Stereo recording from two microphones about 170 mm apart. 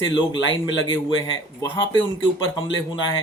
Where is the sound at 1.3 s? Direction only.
25° left (ahead or behind).